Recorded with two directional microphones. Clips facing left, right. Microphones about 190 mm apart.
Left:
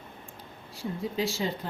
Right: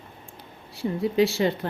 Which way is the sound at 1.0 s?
70° right (ahead or behind).